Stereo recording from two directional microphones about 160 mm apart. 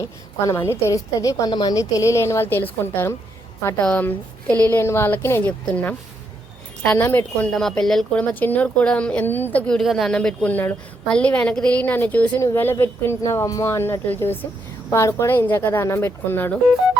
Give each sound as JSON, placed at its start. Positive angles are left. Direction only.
{"t": 0.0, "sound": "speech", "side_deg": 20}